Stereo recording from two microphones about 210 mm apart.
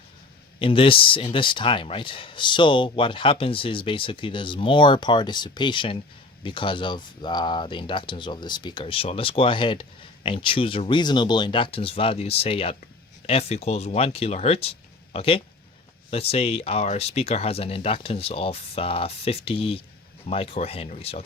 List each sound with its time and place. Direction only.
0.6 s speech: 25° left (ahead or behind)